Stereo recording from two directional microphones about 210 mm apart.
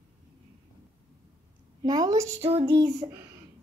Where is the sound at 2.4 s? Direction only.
30° right (ahead or behind).